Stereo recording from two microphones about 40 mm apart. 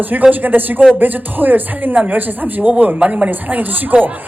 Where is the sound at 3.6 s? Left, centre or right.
Right.